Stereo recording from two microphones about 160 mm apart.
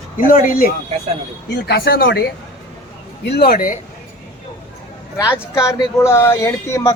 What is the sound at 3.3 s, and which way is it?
Speech, 75° left (ahead or behind).